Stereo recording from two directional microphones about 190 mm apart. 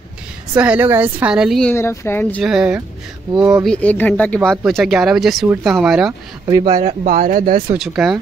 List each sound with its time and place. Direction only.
0.6 s speech: 10° right (ahead or behind)
1.7 s speech: 10° left (ahead or behind)
2.4 s speech: 5° right (ahead or behind)
3.6 s speech: 5° left (ahead or behind)
6.4 s speech: 20° right (ahead or behind)
6.8 s speech: 40° right (ahead or behind)
7.8 s speech: centre (ahead or behind)